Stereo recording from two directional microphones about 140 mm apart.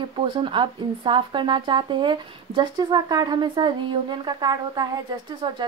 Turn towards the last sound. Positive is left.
turn(degrees=-30)  # may be behind; listen again after turning